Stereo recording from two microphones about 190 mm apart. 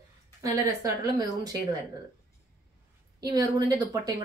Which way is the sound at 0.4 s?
15° right (ahead or behind).